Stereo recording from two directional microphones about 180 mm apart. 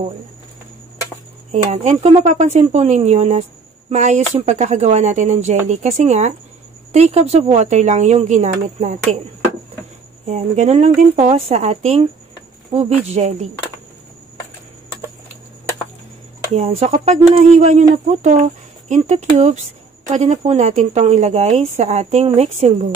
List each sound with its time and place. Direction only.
1.5 s a woman's voice: 40° right (ahead or behind)
10.2 s a woman's voice: 40° right (ahead or behind)
16.5 s a woman's voice: 35° right (ahead or behind)